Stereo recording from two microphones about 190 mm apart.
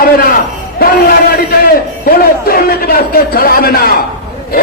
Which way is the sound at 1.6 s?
50° left (ahead or behind).